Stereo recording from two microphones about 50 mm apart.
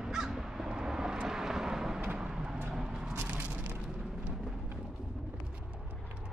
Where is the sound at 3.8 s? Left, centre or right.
Centre.